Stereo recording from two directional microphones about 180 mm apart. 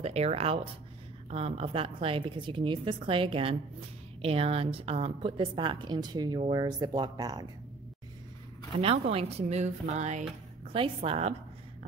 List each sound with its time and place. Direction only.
0.0 s a woman's voice: 35° right (ahead or behind)
8.7 s a woman's voice: 35° right (ahead or behind)
10.7 s a woman's voice: 30° right (ahead or behind)